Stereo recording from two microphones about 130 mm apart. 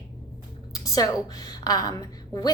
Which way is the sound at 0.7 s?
25° left (ahead or behind).